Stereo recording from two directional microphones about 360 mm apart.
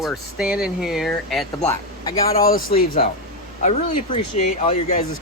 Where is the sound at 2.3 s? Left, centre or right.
Left.